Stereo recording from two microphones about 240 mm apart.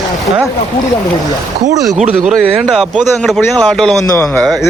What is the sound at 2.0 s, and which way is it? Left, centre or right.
Speech, right.